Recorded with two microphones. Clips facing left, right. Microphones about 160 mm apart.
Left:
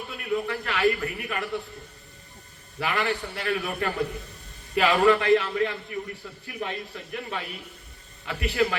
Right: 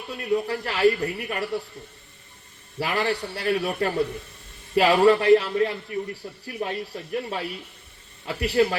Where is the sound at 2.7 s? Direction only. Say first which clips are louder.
Right 2 dB; 35° right (ahead or behind).